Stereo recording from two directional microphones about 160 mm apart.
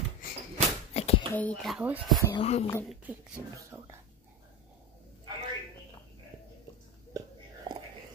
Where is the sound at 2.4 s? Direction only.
40° left (ahead or behind).